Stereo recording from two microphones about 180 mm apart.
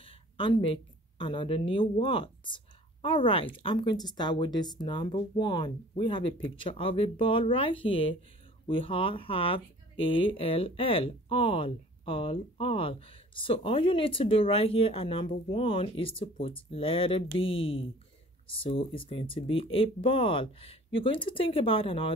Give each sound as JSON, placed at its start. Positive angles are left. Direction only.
{"t": 0.0, "sound": "speech", "side_deg": 30}